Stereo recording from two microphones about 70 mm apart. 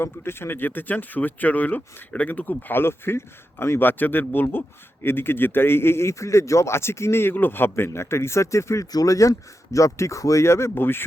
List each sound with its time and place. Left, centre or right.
0.0 s a man's voice: left
8.9 s speech: left